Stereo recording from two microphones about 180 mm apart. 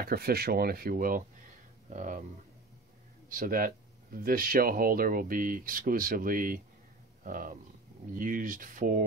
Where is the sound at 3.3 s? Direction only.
50° right (ahead or behind).